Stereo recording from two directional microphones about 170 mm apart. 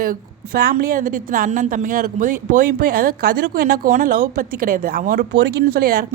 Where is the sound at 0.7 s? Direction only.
50° right (ahead or behind).